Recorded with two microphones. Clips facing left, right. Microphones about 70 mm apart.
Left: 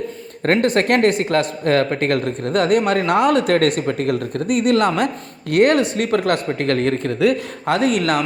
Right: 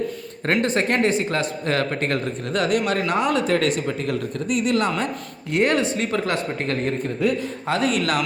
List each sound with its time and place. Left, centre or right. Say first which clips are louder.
0.6 s speech: left 5 dB; left